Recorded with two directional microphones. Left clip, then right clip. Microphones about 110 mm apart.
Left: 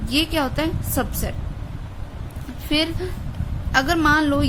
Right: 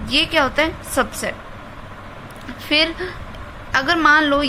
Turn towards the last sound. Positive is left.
turn(degrees=40)  # may be behind; listen again after turning